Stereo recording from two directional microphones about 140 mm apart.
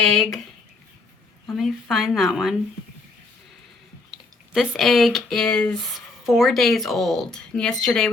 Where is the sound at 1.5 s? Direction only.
Centre (ahead or behind).